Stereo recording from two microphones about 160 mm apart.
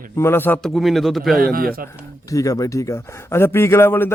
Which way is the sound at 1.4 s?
65° right (ahead or behind).